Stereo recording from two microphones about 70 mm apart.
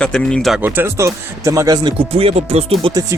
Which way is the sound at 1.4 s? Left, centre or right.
Right.